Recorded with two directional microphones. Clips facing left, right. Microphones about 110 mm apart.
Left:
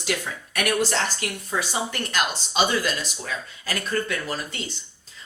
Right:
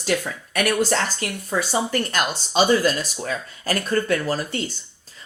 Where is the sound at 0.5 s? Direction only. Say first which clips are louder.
Right 3 dB; 40° right (ahead or behind).